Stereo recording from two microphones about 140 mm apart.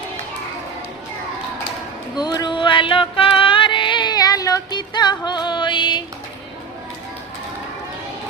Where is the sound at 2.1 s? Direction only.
30° left (ahead or behind).